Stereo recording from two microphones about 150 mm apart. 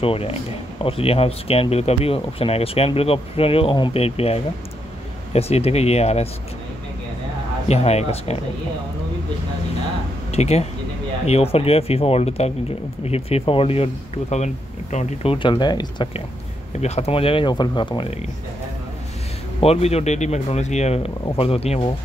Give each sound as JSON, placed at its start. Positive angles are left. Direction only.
{"t": 0.0, "sound": "speech", "side_deg": 40}
{"t": 7.6, "sound": "speech", "side_deg": 45}
{"t": 10.3, "sound": "speech", "side_deg": 45}
{"t": 15.3, "sound": "speech", "side_deg": 35}
{"t": 16.8, "sound": "speech", "side_deg": 45}
{"t": 19.6, "sound": "speech", "side_deg": 45}